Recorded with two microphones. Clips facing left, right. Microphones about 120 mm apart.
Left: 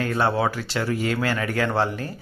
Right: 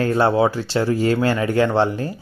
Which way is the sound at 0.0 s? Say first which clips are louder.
Right 6 dB; 25° right (ahead or behind).